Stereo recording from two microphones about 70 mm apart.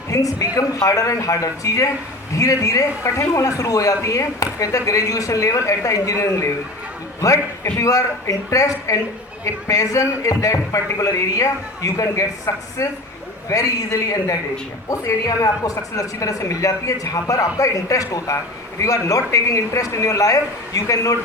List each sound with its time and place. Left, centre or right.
0.1 s a man's voice: left